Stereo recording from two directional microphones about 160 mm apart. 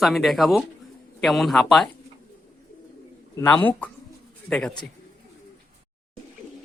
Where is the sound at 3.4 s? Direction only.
10° left (ahead or behind).